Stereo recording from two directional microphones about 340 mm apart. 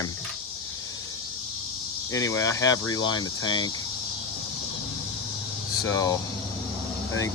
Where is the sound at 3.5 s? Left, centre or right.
Centre.